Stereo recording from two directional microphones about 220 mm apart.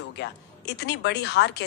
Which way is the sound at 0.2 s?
50° left (ahead or behind).